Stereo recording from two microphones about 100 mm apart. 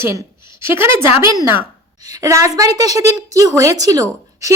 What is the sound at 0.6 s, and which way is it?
A woman's voice, 25° right (ahead or behind).